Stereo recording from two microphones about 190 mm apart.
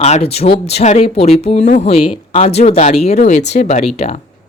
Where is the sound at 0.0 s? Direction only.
35° left (ahead or behind).